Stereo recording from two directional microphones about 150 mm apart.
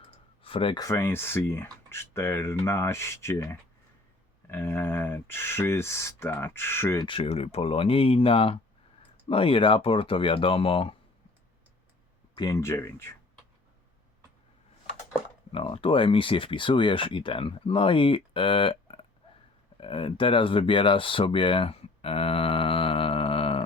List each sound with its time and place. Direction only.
0.0 s clicking: 35° left (ahead or behind)
0.8 s speech: 20° left (ahead or behind)
7.0 s speech: 35° left (ahead or behind)
12.4 s speech: 20° left (ahead or behind)
15.5 s speech: 35° left (ahead or behind)